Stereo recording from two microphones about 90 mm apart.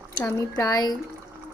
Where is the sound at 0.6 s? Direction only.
45° left (ahead or behind).